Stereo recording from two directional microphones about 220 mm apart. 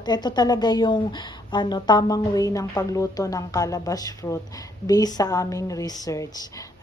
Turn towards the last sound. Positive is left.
turn(degrees=15)  # may be behind; listen again after turning